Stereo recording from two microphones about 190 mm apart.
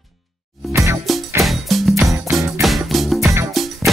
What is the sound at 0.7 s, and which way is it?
Music, 15° right (ahead or behind).